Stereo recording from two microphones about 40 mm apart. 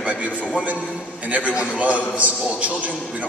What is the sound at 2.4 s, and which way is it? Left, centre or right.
Speech, right.